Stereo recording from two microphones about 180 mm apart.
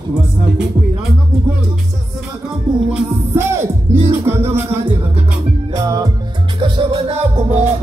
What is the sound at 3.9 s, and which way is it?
Music, 40° right (ahead or behind).